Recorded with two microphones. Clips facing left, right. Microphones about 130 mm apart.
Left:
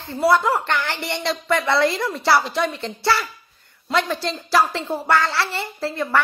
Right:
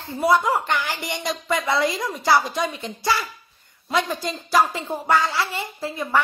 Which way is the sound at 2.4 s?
15° right (ahead or behind).